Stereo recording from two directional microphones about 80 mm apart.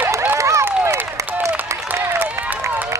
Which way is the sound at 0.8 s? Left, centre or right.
Right.